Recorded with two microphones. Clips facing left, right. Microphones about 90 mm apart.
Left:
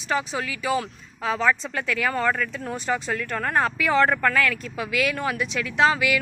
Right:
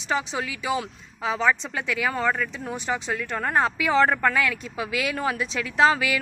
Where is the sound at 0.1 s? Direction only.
20° right (ahead or behind).